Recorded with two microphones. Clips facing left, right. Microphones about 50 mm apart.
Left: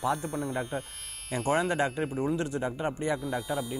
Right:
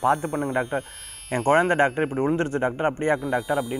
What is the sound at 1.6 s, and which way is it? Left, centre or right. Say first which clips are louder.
Speech: right 8 dB; right.